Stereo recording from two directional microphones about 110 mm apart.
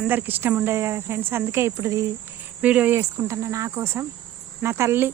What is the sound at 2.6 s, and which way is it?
Speech, 10° right (ahead or behind).